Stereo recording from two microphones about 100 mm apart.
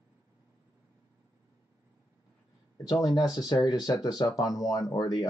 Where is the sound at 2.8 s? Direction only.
40° left (ahead or behind).